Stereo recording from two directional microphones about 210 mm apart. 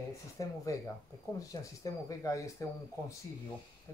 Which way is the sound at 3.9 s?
10° left (ahead or behind).